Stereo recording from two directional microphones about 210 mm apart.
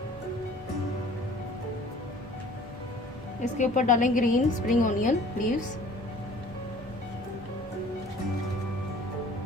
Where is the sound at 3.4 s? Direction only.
35° left (ahead or behind).